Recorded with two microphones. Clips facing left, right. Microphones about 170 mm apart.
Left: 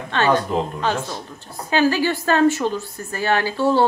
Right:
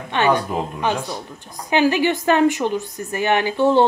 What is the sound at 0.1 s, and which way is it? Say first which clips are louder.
A woman's voice: even; 15° right (ahead or behind).